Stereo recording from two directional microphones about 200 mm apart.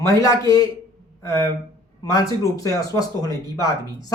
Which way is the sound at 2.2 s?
15° left (ahead or behind).